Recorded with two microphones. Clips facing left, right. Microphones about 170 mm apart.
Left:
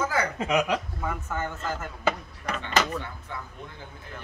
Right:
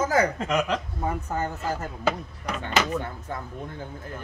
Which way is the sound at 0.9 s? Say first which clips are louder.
Right 3 dB; 35° right (ahead or behind).